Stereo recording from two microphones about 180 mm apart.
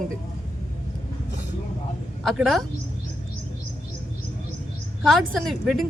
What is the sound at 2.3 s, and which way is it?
Speech, centre (ahead or behind).